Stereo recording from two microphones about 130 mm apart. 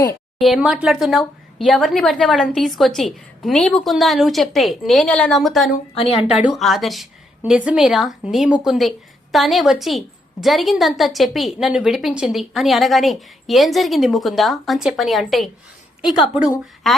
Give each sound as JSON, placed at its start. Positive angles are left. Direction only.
{"t": 0.3, "sound": "a woman's voice", "side_deg": 0}
{"t": 5.9, "sound": "a woman's voice", "side_deg": 45}
{"t": 6.4, "sound": "a woman's voice", "side_deg": 0}
{"t": 16.9, "sound": "speech", "side_deg": 0}